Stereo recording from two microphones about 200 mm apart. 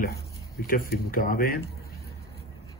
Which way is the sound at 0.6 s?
45° left (ahead or behind).